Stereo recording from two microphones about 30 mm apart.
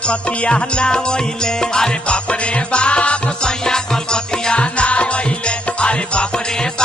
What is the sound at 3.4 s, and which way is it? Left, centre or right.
Music, left.